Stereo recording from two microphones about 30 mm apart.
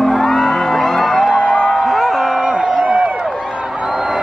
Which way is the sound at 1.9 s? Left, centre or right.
Centre.